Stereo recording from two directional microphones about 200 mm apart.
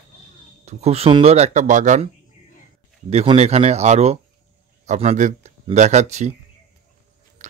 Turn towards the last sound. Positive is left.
turn(degrees=-35)  # may be behind; listen again after turning